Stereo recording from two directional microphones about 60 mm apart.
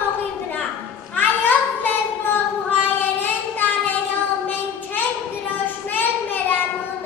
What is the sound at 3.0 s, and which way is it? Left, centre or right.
Child singing, left.